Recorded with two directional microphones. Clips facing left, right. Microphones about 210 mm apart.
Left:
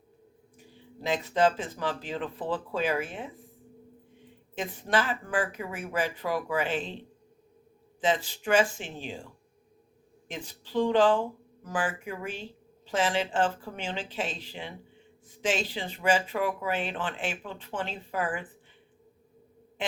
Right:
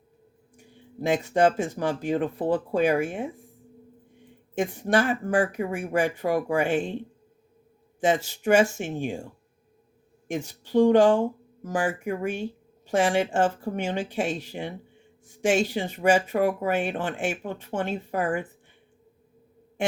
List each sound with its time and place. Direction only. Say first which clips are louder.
1.0 s speech: right 4 dB; 50° right (ahead or behind)
4.5 s speech: right 5 dB; 45° right (ahead or behind)
8.0 s speech: right 5 dB; 50° right (ahead or behind)
10.7 s speech: right 5 dB; 50° right (ahead or behind)